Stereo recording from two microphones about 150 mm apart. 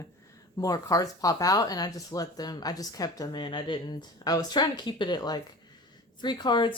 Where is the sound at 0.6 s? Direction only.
25° left (ahead or behind).